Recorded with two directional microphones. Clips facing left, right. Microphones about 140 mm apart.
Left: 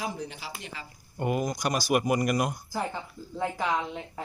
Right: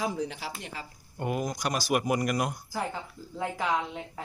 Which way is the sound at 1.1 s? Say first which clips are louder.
Left 2 dB; centre (ahead or behind).